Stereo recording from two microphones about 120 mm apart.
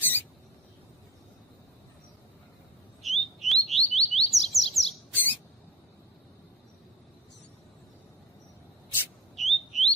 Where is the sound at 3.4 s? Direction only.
Centre (ahead or behind).